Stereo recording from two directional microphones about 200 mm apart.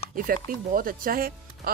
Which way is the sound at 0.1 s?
45° right (ahead or behind).